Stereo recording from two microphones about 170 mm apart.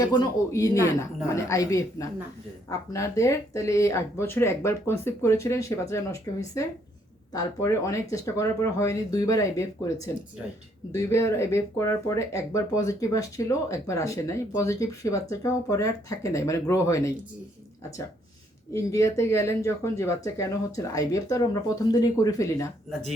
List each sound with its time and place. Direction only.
0.0 s speech: 25° left (ahead or behind)
10.9 s speech: 15° left (ahead or behind)
18.7 s speech: 20° left (ahead or behind)